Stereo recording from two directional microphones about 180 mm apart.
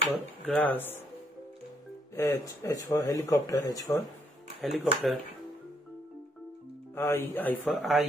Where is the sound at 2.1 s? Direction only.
15° left (ahead or behind).